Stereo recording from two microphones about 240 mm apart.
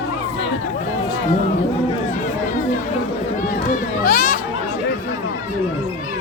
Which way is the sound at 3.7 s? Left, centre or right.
Left.